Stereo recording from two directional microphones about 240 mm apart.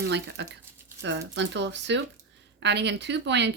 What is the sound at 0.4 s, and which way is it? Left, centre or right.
Speech, right.